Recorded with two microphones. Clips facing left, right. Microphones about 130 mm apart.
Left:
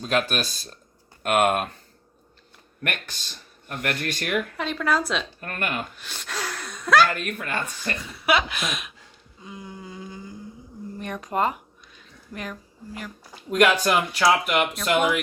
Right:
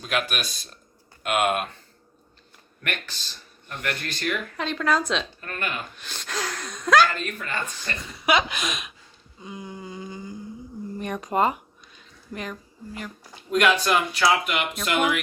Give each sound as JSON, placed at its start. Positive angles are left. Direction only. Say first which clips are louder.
{"t": 0.0, "sound": "speech", "louder": "left 3 dB", "side_deg": 35}
{"t": 1.2, "sound": "speech", "louder": "left 3 dB", "side_deg": 50}
{"t": 2.8, "sound": "speech", "louder": "left 1 dB", "side_deg": 50}
{"t": 4.5, "sound": "speech", "louder": "even", "side_deg": 5}
{"t": 5.4, "sound": "speech", "louder": "left 2 dB", "side_deg": 50}
{"t": 6.0, "sound": "speech", "louder": "right 1 dB", "side_deg": 5}
{"t": 7.1, "sound": "speech", "louder": "left 2 dB", "side_deg": 55}
{"t": 8.2, "sound": "speech", "louder": "even", "side_deg": 5}
{"t": 13.5, "sound": "speech", "louder": "left 1 dB", "side_deg": 40}